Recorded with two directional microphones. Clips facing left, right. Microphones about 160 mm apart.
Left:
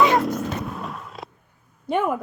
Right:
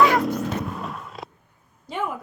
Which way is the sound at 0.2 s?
Centre (ahead or behind).